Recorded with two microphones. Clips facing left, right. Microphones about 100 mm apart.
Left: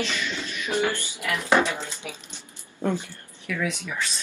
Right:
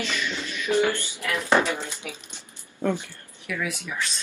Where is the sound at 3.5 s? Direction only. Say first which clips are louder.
Left 1 dB; 20° right (ahead or behind).